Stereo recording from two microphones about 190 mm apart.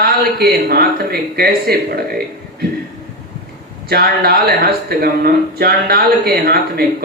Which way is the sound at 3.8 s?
55° right (ahead or behind).